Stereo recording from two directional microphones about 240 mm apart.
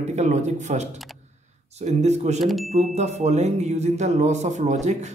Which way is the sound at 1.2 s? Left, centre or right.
Right.